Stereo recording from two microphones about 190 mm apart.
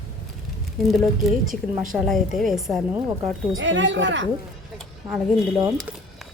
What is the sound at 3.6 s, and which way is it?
Speech, 75° right (ahead or behind).